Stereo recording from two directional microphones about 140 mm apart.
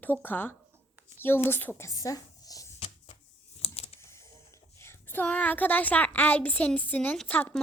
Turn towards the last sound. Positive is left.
turn(degrees=10)  # may be behind; listen again after turning